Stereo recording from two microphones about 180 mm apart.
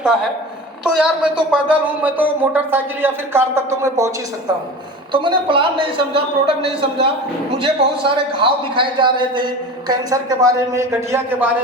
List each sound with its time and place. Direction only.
0.9 s speech: 5° right (ahead or behind)
5.1 s a man's voice: 25° right (ahead or behind)